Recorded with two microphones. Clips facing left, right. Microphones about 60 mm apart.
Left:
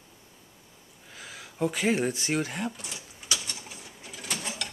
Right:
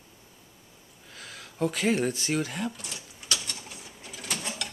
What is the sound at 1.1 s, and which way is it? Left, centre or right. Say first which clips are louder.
Speech: even; centre.